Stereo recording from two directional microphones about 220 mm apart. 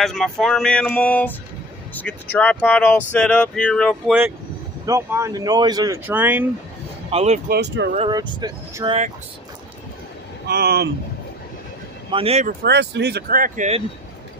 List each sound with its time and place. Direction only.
0.0 s speech: centre (ahead or behind)
4.8 s speech: 15° right (ahead or behind)
7.1 s speech: 30° right (ahead or behind)
7.4 s speech: 50° right (ahead or behind)
8.1 s speech: 20° right (ahead or behind)
10.4 s speech: 45° right (ahead or behind)
12.1 s speech: 25° right (ahead or behind)
12.6 s speech: 50° right (ahead or behind); by 13.8 s 30° right (ahead or behind)